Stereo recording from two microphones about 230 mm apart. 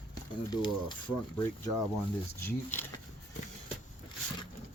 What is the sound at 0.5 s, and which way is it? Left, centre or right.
Speech, centre.